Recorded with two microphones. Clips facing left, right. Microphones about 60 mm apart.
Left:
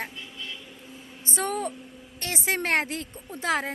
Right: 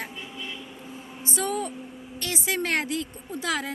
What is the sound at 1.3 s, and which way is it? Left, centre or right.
Speech, left.